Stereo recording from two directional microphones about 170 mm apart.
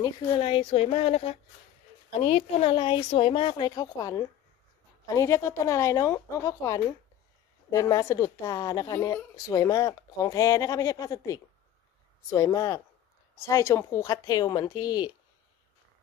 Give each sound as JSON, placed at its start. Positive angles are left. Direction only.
{"t": 0.0, "sound": "a woman's voice", "side_deg": 30}